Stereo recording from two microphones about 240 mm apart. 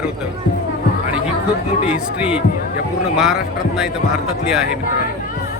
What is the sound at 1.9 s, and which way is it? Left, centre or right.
Speech, centre.